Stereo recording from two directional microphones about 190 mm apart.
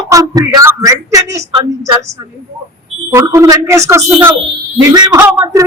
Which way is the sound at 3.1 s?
15° right (ahead or behind).